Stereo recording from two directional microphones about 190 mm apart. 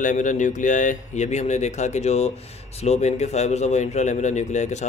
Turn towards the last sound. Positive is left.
turn(degrees=35)  # may be behind; listen again after turning